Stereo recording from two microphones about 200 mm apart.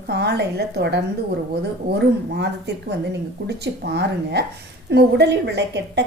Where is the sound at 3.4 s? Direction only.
55° right (ahead or behind).